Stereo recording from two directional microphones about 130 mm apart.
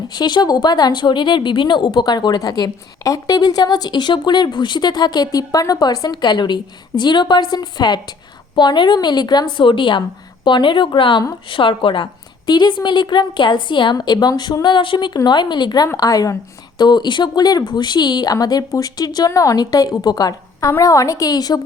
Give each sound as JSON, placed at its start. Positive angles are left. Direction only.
{"t": 0.1, "sound": "speech", "side_deg": 35}